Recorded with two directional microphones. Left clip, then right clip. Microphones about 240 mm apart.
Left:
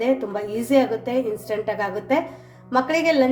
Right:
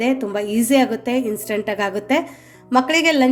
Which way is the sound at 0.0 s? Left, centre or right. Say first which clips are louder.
Right 2 dB; right.